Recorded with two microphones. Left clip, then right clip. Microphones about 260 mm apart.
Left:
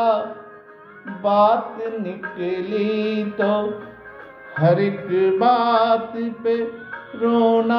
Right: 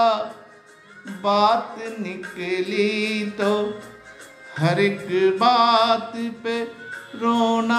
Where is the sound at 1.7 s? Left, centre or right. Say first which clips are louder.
Left 4 dB; centre.